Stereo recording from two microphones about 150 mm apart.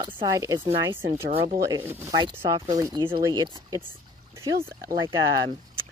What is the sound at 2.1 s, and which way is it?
Speech, 30° right (ahead or behind).